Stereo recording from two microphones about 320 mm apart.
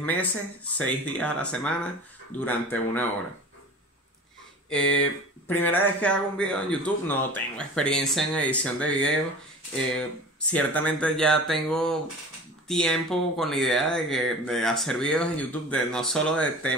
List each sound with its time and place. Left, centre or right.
0.0 s speech: centre
4.6 s speech: centre